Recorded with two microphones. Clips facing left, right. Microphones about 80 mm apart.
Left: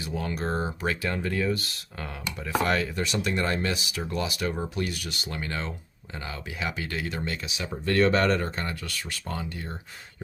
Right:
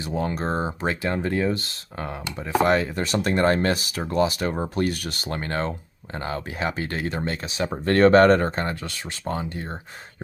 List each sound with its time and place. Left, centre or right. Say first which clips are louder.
0.0 s speech: right 4 dB; right
3.1 s speech: right 11 dB; right